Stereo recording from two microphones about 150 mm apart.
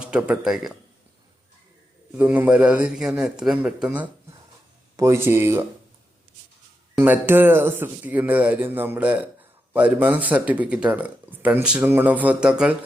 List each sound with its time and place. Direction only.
0.0 s speech: 5° right (ahead or behind)
2.1 s speech: 10° right (ahead or behind)
7.0 s speech: 15° right (ahead or behind)